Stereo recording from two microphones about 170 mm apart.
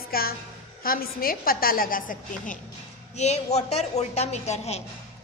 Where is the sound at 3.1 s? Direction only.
40° left (ahead or behind).